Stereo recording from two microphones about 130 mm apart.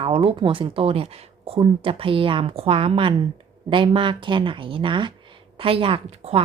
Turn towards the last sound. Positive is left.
turn(degrees=-50)  # may be behind; listen again after turning